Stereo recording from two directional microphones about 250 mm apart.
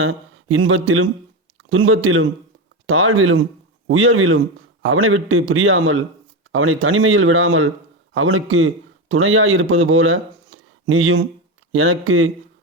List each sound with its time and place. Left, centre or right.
0.0 s a man's voice: right